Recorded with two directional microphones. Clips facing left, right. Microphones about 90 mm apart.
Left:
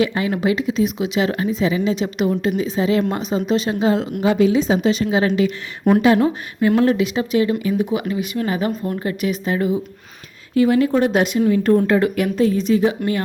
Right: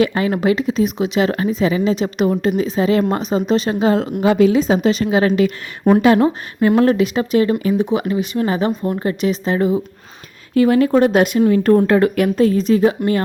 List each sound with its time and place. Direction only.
0.0 s speech: 45° right (ahead or behind)
6.1 s speech: 40° right (ahead or behind)
10.5 s speech: 55° right (ahead or behind)